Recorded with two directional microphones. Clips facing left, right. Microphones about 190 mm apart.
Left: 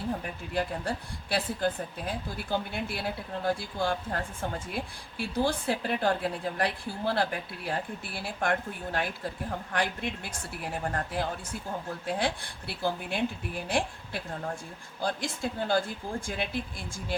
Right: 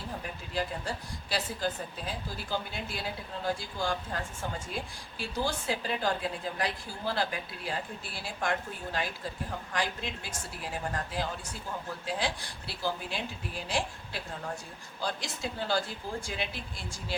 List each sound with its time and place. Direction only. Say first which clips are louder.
0.5 s a woman's voice: left 3 dB; 55° left (ahead or behind)